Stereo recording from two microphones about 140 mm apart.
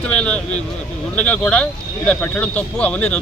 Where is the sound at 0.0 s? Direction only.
10° left (ahead or behind).